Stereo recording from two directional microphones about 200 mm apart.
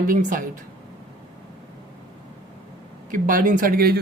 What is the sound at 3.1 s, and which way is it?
Speech, 40° right (ahead or behind).